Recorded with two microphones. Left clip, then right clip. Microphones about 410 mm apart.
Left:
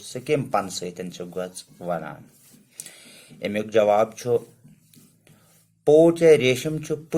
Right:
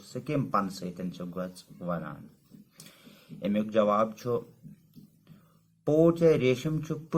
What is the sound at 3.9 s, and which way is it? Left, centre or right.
Speech, centre.